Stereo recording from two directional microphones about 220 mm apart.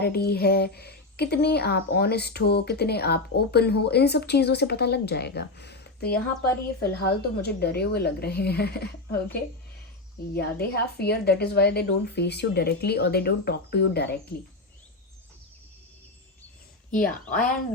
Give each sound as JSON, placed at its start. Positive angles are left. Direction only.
{"t": 0.0, "sound": "speech", "side_deg": 45}
{"t": 16.9, "sound": "a woman's voice", "side_deg": 40}